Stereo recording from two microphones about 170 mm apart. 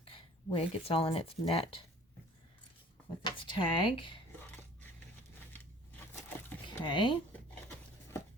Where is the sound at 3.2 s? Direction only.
30° left (ahead or behind).